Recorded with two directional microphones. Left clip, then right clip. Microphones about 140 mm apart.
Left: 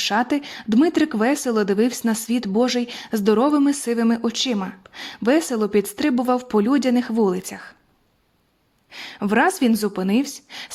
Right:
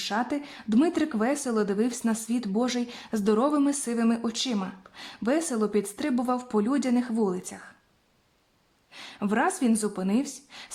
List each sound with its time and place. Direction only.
0.0 s speech: 40° left (ahead or behind)
8.9 s speech: 40° left (ahead or behind)